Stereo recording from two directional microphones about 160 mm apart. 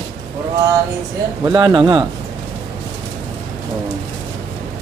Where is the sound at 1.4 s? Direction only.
25° right (ahead or behind).